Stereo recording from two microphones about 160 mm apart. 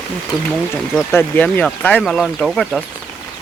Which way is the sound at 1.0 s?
10° left (ahead or behind).